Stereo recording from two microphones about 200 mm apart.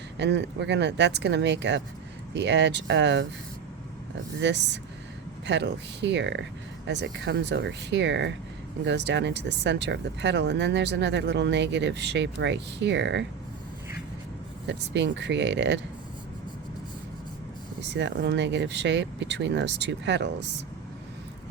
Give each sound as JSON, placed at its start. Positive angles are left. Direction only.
{"t": 0.2, "sound": "speech", "side_deg": -60}
{"t": 4.4, "sound": "speech", "side_deg": -60}
{"t": 14.7, "sound": "speech", "side_deg": -60}
{"t": 17.9, "sound": "speech", "side_deg": -60}